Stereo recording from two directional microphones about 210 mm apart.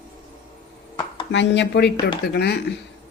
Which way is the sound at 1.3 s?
55° left (ahead or behind).